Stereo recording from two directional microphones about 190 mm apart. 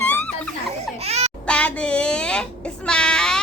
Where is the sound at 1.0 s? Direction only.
35° right (ahead or behind).